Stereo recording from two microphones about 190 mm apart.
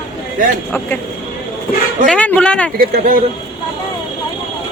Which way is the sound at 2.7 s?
50° right (ahead or behind).